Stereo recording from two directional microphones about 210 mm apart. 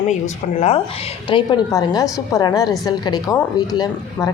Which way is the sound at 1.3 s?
20° left (ahead or behind).